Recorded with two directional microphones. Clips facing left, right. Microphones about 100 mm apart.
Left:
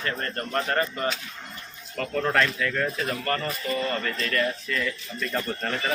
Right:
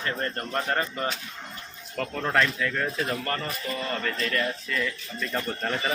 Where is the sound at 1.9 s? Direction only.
10° right (ahead or behind).